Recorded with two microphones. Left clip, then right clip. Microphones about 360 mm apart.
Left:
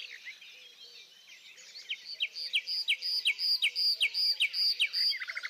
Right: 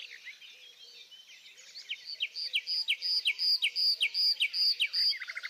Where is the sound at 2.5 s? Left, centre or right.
Left.